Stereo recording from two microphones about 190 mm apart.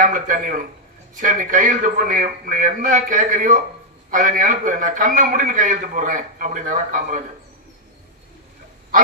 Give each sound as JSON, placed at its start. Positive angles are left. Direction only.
{"t": 0.0, "sound": "a man's voice", "side_deg": -45}